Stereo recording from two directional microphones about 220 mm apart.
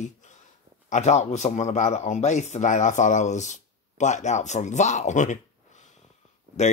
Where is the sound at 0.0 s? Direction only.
35° left (ahead or behind).